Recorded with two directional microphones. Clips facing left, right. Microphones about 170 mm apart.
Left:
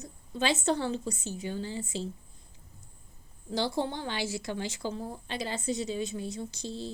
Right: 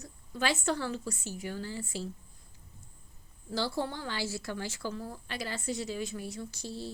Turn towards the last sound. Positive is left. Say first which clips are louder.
# left 3 dB
turn(degrees=20)  # may be behind; listen again after turning